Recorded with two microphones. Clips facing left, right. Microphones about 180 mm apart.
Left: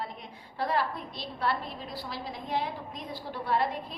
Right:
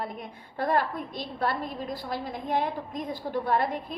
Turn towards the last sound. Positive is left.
turn(degrees=-50)  # may be behind; listen again after turning